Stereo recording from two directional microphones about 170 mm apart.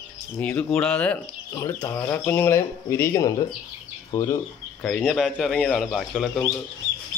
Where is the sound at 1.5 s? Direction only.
25° left (ahead or behind).